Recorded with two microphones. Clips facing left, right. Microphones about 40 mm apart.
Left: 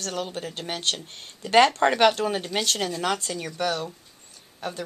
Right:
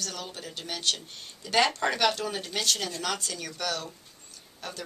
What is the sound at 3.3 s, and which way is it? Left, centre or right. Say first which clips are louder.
Speech: left 6 dB; left.